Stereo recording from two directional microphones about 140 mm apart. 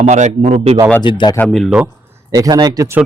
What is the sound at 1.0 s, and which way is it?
Speech, 35° left (ahead or behind).